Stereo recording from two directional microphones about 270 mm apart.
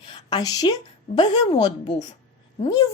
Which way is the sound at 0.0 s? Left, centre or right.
Centre.